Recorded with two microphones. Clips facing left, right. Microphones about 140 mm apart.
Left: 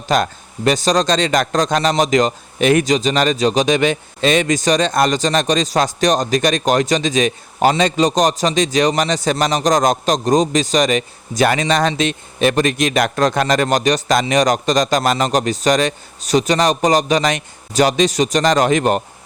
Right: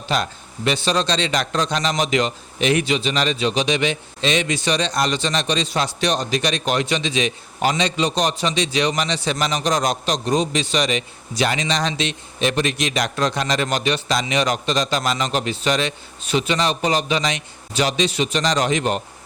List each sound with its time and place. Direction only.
0.1 s a man's voice: 45° left (ahead or behind)